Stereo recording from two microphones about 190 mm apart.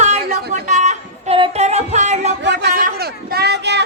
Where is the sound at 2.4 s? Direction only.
65° right (ahead or behind).